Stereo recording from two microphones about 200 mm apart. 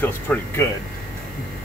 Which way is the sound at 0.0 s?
10° left (ahead or behind).